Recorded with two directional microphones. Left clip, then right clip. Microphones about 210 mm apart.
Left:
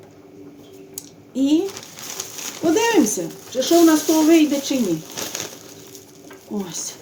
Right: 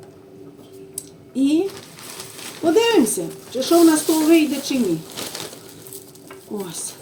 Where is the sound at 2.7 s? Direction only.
25° left (ahead or behind).